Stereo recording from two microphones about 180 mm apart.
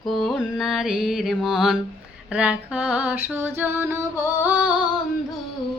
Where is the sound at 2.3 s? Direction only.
5° right (ahead or behind).